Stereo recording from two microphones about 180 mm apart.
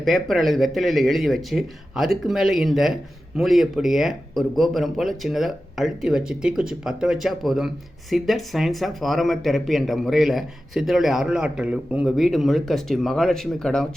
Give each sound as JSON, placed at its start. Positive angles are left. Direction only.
{"t": 0.0, "sound": "speech", "side_deg": 0}